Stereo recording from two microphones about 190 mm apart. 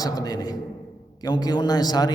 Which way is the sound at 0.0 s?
20° left (ahead or behind).